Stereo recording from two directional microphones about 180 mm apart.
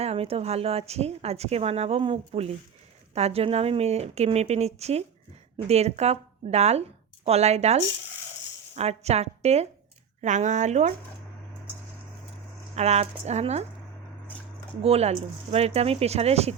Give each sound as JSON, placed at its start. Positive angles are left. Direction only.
{"t": 0.0, "sound": "a woman's voice", "side_deg": -35}
{"t": 12.7, "sound": "a woman's voice", "side_deg": -35}
{"t": 14.8, "sound": "a woman's voice", "side_deg": -35}